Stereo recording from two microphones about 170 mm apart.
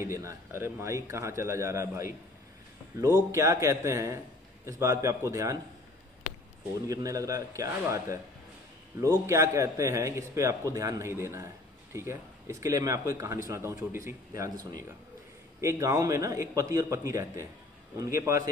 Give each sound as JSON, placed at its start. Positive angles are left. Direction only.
{"t": 0.0, "sound": "a man's voice", "side_deg": -15}
{"t": 3.3, "sound": "a man's voice", "side_deg": -15}
{"t": 6.9, "sound": "a man's voice", "side_deg": -20}